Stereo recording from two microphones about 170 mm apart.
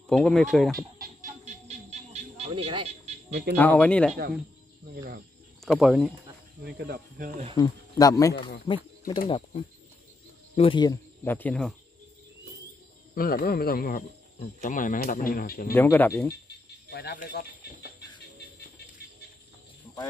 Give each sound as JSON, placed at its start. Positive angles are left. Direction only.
{"t": 0.1, "sound": "speech", "side_deg": 5}
{"t": 0.9, "sound": "a sound", "side_deg": -55}
{"t": 3.3, "sound": "speech", "side_deg": -65}
{"t": 3.5, "sound": "speech", "side_deg": 10}
{"t": 4.9, "sound": "cricket", "side_deg": -60}
{"t": 5.7, "sound": "speech", "side_deg": 0}
{"t": 6.6, "sound": "speech", "side_deg": -70}
{"t": 7.5, "sound": "speech", "side_deg": 25}
{"t": 8.6, "sound": "speech", "side_deg": 30}
{"t": 11.2, "sound": "speech", "side_deg": 10}
{"t": 13.1, "sound": "speech", "side_deg": 60}
{"t": 14.4, "sound": "speech", "side_deg": 50}
{"t": 15.7, "sound": "speech", "side_deg": 10}
{"t": 16.4, "sound": "speech", "side_deg": 75}